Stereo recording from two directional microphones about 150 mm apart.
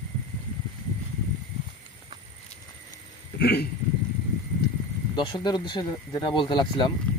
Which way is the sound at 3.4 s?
90° left.